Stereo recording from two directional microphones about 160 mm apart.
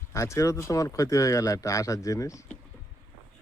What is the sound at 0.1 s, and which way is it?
Speech, 20° left (ahead or behind).